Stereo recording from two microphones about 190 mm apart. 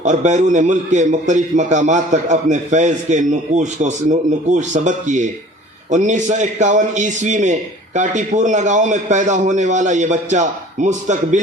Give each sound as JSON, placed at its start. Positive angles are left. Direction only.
{"t": 0.0, "sound": "a man's voice", "side_deg": -40}